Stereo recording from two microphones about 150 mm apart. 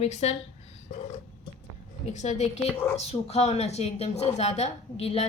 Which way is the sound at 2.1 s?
50° left (ahead or behind).